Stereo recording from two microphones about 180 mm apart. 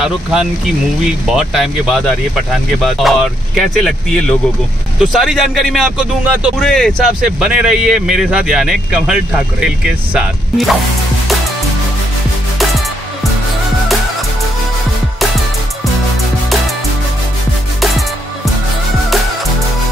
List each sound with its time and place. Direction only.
0.0 s speech: 5° right (ahead or behind)